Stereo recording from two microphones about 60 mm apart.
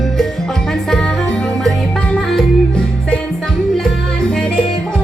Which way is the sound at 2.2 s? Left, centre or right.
Centre.